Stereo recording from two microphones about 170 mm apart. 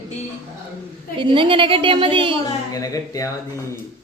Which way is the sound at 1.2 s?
30° right (ahead or behind).